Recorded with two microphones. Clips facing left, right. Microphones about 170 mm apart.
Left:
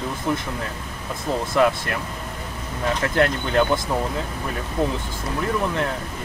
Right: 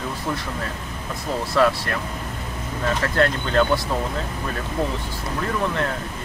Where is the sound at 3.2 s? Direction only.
20° left (ahead or behind).